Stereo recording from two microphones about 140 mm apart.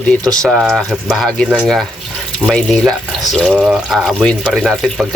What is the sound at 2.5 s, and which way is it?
Speech, 5° left (ahead or behind).